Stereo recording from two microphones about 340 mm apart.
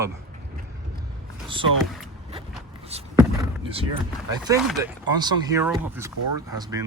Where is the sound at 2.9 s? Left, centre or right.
Centre.